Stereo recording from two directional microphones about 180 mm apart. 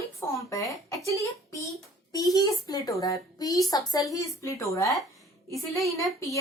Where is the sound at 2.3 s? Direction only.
20° left (ahead or behind).